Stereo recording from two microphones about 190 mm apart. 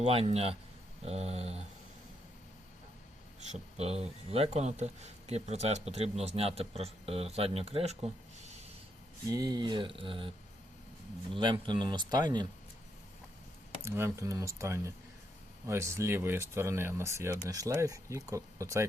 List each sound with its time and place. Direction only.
0.0 s a man's voice: 35° right (ahead or behind)
3.5 s a man's voice: 35° right (ahead or behind)
9.3 s speech: 20° right (ahead or behind)
11.3 s speech: 25° right (ahead or behind)
13.8 s speech: 15° right (ahead or behind)